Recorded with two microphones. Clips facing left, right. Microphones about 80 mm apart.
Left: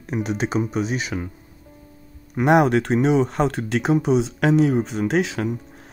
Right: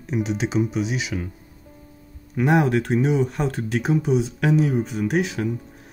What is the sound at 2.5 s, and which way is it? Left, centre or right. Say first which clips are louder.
Speech: left 3 dB; left.